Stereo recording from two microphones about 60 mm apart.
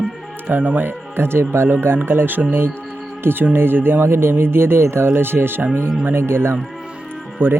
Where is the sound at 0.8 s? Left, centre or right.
Right.